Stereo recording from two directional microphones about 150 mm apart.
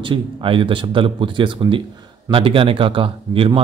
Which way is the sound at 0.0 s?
35° right (ahead or behind).